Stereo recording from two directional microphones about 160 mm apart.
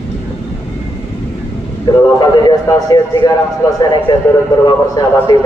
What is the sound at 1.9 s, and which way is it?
Speech, 25° left (ahead or behind).